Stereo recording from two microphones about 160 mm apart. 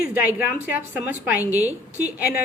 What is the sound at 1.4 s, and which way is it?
Speech, 20° left (ahead or behind).